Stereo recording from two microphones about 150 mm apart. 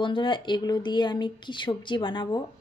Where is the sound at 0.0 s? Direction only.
35° left (ahead or behind).